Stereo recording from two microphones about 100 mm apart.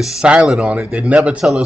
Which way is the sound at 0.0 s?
5° right (ahead or behind).